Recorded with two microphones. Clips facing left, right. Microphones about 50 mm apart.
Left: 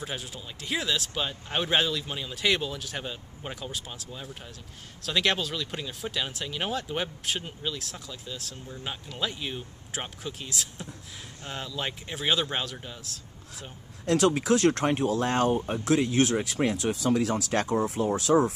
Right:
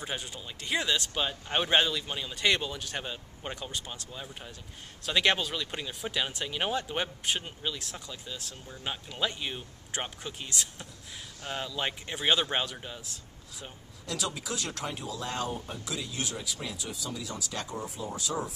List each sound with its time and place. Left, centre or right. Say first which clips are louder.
0.0 s speech: left 1 dB; centre
14.0 s speech: left 12 dB; left